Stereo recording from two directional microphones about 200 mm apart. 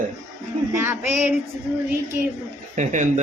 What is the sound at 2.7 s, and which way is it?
Speech, 40° right (ahead or behind).